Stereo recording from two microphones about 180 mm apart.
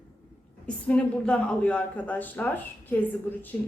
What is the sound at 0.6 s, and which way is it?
A woman's voice, 5° left (ahead or behind).